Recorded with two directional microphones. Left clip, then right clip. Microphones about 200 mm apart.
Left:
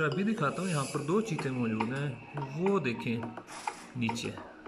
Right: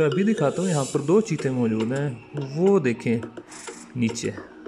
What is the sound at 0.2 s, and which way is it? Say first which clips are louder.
Speech: right 9 dB; 25° right (ahead or behind).